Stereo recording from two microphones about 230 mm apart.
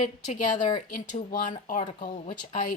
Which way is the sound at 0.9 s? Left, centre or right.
Left.